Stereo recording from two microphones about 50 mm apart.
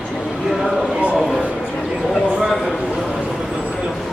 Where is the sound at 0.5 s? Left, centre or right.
Centre.